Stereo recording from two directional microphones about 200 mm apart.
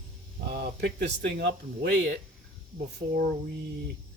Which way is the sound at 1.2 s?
55° right (ahead or behind).